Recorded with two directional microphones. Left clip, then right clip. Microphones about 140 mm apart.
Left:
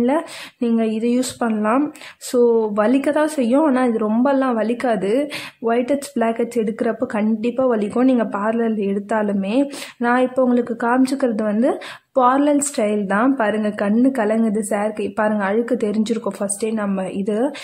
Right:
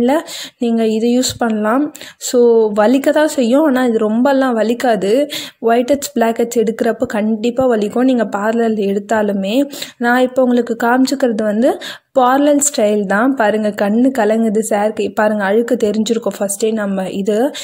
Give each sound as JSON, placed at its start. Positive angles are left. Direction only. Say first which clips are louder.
{"t": 0.0, "sound": "a woman's voice", "louder": "right 5 dB", "side_deg": -35}